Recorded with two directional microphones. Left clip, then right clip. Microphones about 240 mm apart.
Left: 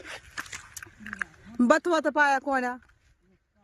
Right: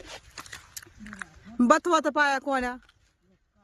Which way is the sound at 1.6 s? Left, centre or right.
Centre.